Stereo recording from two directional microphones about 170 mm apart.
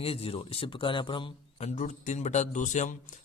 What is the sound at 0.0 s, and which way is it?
Speech, 35° left (ahead or behind).